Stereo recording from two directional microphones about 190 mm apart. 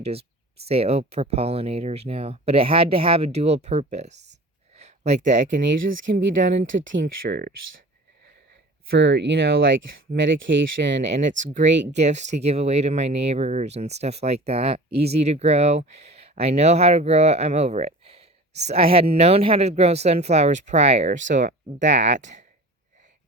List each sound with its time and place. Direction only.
0.0 s speech: 30° right (ahead or behind)
4.8 s a sound: 35° right (ahead or behind)
5.6 s speech: 75° right (ahead or behind)
7.0 s speech: 55° right (ahead or behind)
9.0 s speech: 65° right (ahead or behind)
11.3 s speech: 40° right (ahead or behind)
11.7 s speech: 70° right (ahead or behind)
11.9 s speech: 35° right (ahead or behind)